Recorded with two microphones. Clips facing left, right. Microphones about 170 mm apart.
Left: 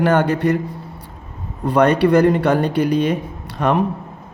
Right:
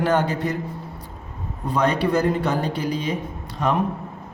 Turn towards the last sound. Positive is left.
turn(degrees=60)  # may be behind; listen again after turning